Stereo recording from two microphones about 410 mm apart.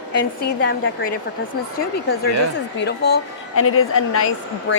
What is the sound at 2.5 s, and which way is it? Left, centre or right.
A woman's voice, left.